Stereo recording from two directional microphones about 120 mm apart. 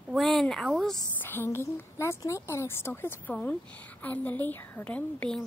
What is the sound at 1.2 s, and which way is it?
A woman's voice, 20° left (ahead or behind).